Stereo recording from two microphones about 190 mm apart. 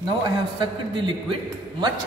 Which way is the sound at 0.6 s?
25° right (ahead or behind).